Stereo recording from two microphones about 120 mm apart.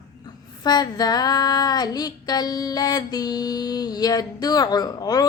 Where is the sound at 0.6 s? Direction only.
35° left (ahead or behind).